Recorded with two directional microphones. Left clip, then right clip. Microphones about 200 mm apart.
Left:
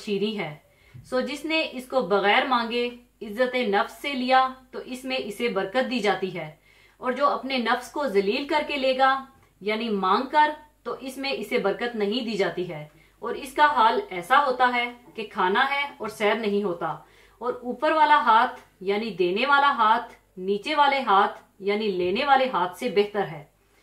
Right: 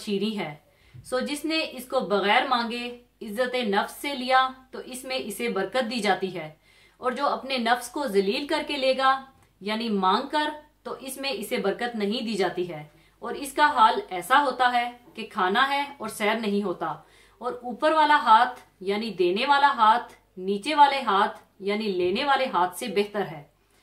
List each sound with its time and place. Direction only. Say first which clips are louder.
0.0 s a woman's voice: left 2 dB; 35° right (ahead or behind)